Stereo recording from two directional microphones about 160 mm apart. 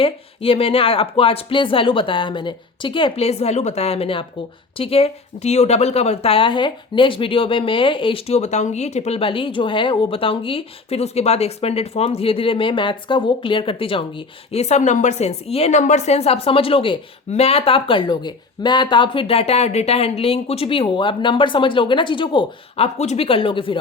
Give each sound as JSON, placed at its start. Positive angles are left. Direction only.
{"t": 0.0, "sound": "speech", "side_deg": 35}
{"t": 23.0, "sound": "speech", "side_deg": 40}